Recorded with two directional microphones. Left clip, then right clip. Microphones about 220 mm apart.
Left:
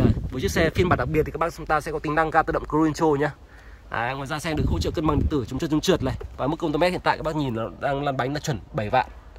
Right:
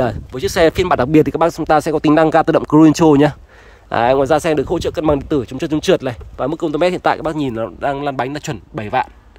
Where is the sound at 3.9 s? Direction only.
25° right (ahead or behind).